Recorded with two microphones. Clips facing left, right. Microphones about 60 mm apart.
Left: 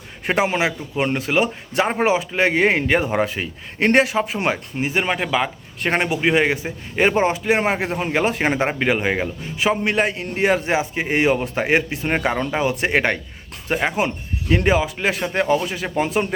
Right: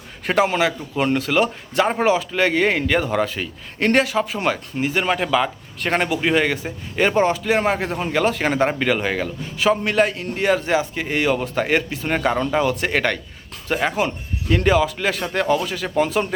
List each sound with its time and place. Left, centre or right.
0.3 s a man's voice: centre